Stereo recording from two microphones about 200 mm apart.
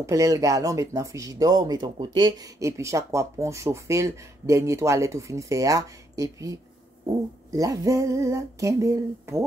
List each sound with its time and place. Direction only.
0.0 s speech: 15° right (ahead or behind)